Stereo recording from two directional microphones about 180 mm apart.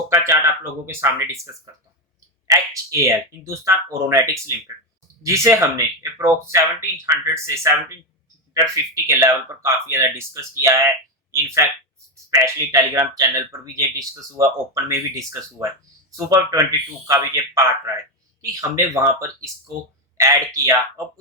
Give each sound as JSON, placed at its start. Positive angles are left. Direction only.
{"t": 0.1, "sound": "a man's voice", "side_deg": -15}
{"t": 5.2, "sound": "a man's voice", "side_deg": -15}